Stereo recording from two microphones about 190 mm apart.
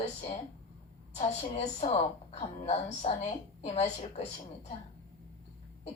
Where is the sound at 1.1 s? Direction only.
35° left (ahead or behind).